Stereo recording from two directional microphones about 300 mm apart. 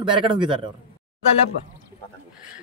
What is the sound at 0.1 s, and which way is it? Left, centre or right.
Speech, centre.